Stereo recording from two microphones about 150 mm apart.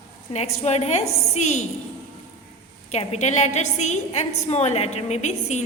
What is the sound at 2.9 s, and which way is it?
A woman's voice, 50° left (ahead or behind).